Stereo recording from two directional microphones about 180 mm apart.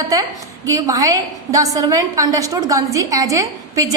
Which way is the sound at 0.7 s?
20° right (ahead or behind).